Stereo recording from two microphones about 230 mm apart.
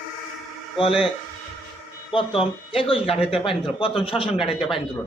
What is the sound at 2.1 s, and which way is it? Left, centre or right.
Speech, left.